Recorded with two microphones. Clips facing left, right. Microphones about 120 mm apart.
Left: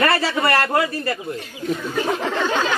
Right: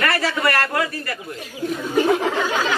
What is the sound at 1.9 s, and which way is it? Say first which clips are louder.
Speech: right 7 dB; 10° right (ahead or behind).